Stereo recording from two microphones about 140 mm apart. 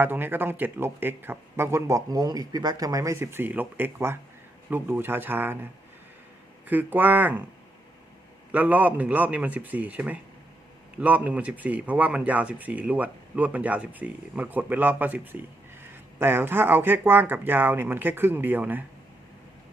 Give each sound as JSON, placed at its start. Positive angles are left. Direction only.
{"t": 0.0, "sound": "speech", "side_deg": -15}
{"t": 6.7, "sound": "speech", "side_deg": -15}
{"t": 8.5, "sound": "speech", "side_deg": -10}